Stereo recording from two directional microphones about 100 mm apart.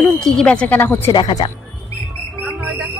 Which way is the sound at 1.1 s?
50° left (ahead or behind).